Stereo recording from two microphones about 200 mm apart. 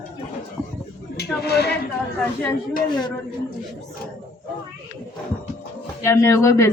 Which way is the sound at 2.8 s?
20° left (ahead or behind).